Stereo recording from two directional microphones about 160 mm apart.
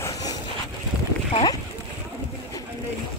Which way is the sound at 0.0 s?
25° left (ahead or behind).